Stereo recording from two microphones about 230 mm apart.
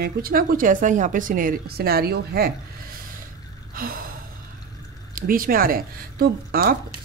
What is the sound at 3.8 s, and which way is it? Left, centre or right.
Gasp, right.